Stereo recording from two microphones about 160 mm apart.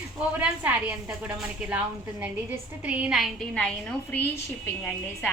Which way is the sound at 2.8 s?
10° right (ahead or behind).